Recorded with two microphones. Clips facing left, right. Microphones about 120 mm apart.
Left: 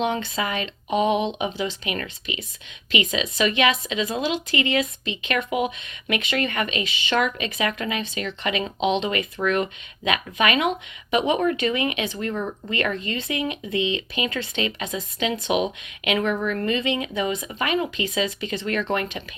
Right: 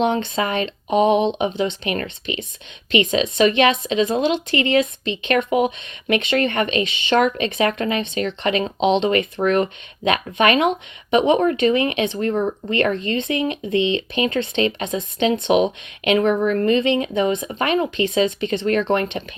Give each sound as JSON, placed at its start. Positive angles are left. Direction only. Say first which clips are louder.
{"t": 0.0, "sound": "a woman's voice", "louder": "right 5 dB", "side_deg": -25}